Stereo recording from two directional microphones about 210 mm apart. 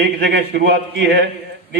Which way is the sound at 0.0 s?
50° right (ahead or behind).